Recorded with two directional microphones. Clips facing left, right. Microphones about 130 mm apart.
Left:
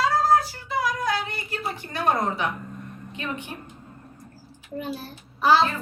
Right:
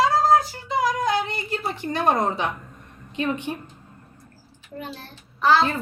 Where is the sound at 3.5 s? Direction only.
30° right (ahead or behind).